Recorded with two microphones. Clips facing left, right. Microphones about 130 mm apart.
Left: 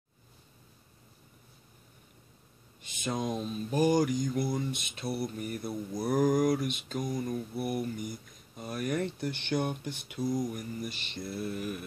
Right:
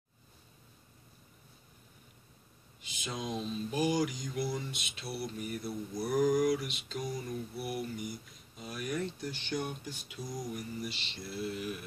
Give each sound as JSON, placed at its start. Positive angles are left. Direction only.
{"t": 2.8, "sound": "mantra", "side_deg": 50}